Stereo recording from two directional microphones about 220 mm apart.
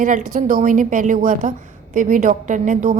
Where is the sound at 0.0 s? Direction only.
35° right (ahead or behind).